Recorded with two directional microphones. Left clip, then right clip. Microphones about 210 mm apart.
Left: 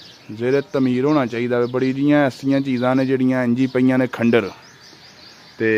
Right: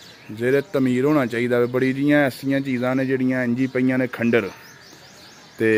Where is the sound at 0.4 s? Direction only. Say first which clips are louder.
Left 1 dB; 10° left (ahead or behind).